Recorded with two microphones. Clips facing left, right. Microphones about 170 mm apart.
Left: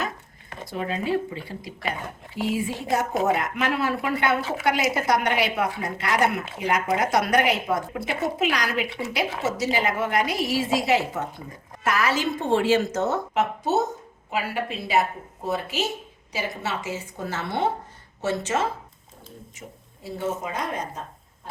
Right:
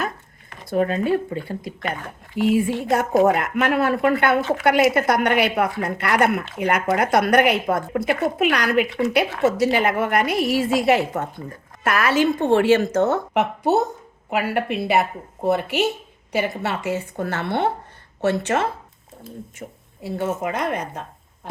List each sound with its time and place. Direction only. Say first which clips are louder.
0.7 s a woman's voice: right 6 dB; 50° right (ahead or behind)